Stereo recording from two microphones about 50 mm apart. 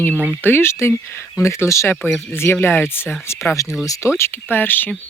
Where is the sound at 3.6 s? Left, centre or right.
Left.